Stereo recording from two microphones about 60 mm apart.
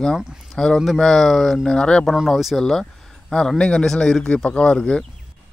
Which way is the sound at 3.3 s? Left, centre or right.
Centre.